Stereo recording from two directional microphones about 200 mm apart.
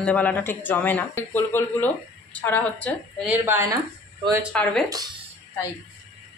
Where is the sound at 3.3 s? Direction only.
10° right (ahead or behind).